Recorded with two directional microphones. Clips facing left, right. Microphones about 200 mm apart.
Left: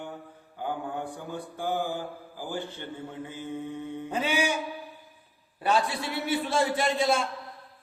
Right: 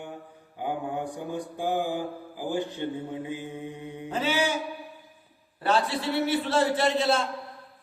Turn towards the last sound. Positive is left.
turn(degrees=10)  # may be behind; listen again after turning